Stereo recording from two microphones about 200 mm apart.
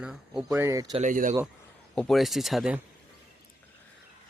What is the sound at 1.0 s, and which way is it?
Speech, 40° right (ahead or behind).